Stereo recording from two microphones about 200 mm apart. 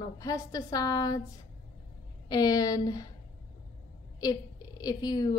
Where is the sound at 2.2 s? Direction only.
20° left (ahead or behind).